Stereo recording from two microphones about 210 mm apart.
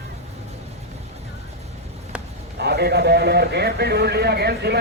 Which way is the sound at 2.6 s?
50° right (ahead or behind).